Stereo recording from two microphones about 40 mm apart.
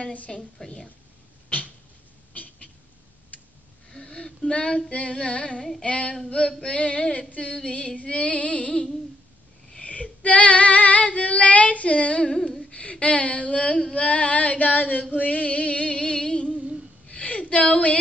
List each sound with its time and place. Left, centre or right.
0.3 s female singing: centre
2.3 s a sound: left
3.9 s female singing: left
5.6 s humming: centre
5.9 s female singing: left
12.3 s humming: centre
12.6 s speech: left
13.9 s female singing: left
15.1 s music: left
17.1 s a sound: left